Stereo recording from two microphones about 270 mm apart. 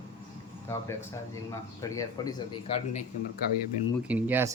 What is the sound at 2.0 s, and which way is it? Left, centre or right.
Speech, centre.